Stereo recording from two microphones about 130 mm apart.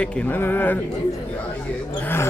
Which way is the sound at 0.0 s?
15° left (ahead or behind).